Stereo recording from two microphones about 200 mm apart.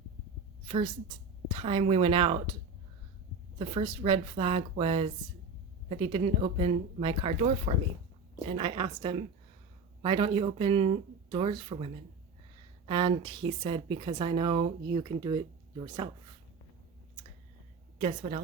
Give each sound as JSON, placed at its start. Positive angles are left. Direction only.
{"t": 1.5, "sound": "speech", "side_deg": -30}
{"t": 3.6, "sound": "speech", "side_deg": -30}
{"t": 18.0, "sound": "a woman's voice", "side_deg": -35}